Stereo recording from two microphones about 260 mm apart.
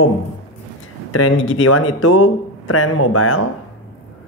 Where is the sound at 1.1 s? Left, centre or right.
Left.